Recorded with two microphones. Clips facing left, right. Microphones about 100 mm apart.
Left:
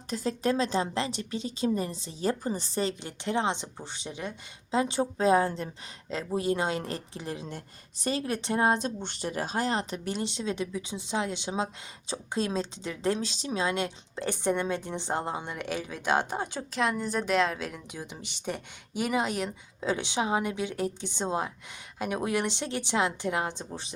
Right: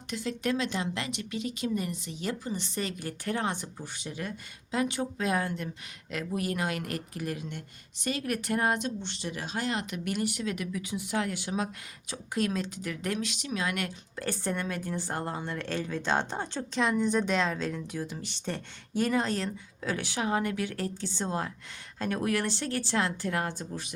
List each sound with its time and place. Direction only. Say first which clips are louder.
0.1 s a woman's voice: left 3 dB; 35° left (ahead or behind)
9.0 s speech: left 4 dB; 45° left (ahead or behind); by 23.9 s 25° left (ahead or behind)